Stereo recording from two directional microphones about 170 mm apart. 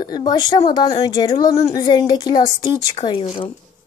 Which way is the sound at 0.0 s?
25° left (ahead or behind).